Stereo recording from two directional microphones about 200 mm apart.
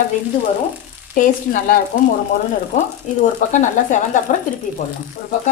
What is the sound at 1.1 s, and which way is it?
Speech, 45° left (ahead or behind).